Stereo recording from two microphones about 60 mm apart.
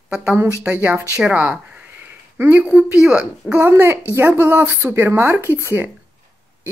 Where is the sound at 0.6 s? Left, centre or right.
Right.